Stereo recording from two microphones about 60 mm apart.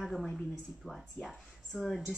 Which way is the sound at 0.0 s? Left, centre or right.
Centre.